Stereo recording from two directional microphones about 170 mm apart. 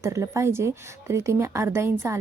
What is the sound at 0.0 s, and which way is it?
A woman's voice, 20° right (ahead or behind).